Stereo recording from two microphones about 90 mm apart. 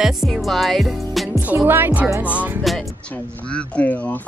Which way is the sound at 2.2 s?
15° right (ahead or behind).